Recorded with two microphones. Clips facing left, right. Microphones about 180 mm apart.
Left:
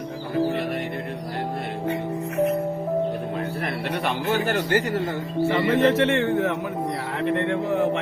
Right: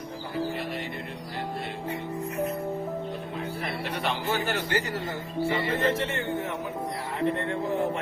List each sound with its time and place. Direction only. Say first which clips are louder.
4.0 s speech: left 4 dB; 50° left (ahead or behind)
5.5 s speech: left 7 dB; 75° left (ahead or behind)